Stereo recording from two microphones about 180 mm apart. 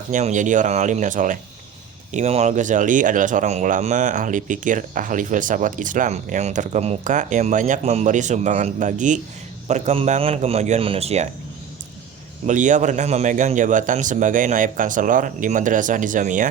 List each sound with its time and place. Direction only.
0.1 s a man's voice: 40° right (ahead or behind)
12.5 s speech: 45° right (ahead or behind)